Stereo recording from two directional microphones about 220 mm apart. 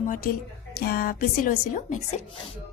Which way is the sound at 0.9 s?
40° left (ahead or behind).